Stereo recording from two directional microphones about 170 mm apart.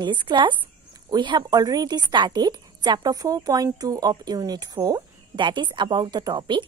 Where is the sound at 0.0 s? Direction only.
25° right (ahead or behind).